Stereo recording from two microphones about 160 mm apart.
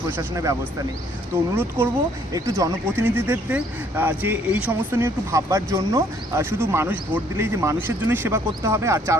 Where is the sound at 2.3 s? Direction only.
20° right (ahead or behind).